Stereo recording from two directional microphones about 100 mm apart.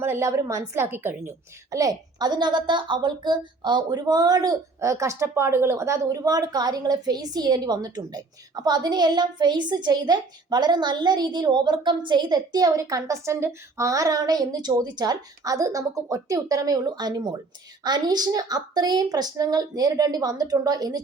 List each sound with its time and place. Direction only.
0.0 s a woman's voice: 30° right (ahead or behind)
1.7 s a woman's voice: 35° right (ahead or behind)